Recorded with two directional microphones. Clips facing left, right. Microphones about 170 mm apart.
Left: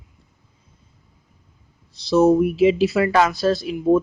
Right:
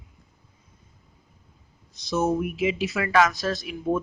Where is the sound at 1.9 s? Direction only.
35° left (ahead or behind).